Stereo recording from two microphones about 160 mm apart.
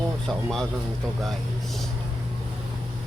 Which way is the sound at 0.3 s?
Centre (ahead or behind).